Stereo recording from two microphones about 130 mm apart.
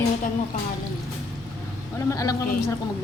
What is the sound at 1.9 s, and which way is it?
Speech, 25° left (ahead or behind).